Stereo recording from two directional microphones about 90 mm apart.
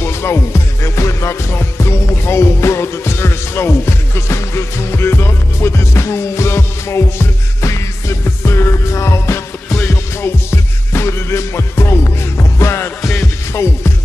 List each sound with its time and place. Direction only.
0.0 s music: 30° left (ahead or behind)